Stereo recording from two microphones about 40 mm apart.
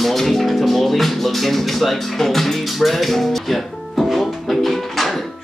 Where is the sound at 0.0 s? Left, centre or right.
Centre.